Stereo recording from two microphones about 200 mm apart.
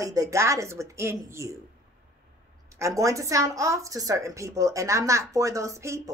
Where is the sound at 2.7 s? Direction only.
15° right (ahead or behind).